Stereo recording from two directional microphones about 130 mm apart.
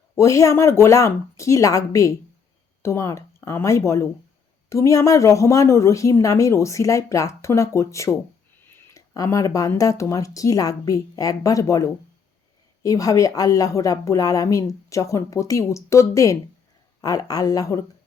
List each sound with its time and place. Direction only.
0.2 s a woman's voice: 25° left (ahead or behind)